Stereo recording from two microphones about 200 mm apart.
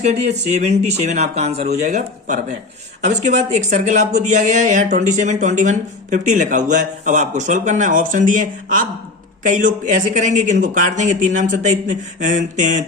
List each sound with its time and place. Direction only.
0.0 s speech: 35° right (ahead or behind)